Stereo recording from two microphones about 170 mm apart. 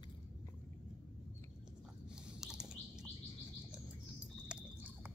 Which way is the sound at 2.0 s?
5° right (ahead or behind).